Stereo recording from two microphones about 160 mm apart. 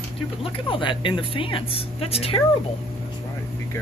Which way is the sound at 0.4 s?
30° left (ahead or behind).